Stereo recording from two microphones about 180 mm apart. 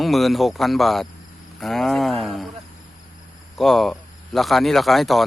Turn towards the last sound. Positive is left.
turn(degrees=0)  # may be behind; listen again after turning